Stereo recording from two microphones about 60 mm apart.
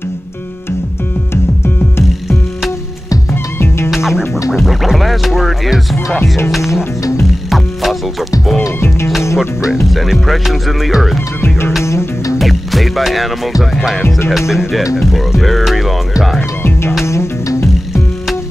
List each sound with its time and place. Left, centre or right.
3.5 s music: left
4.6 s speech: centre
7.0 s music: left
7.4 s music: centre
8.7 s music: left
9.8 s music: centre
11.8 s music: left
12.4 s music: centre
17.0 s music: left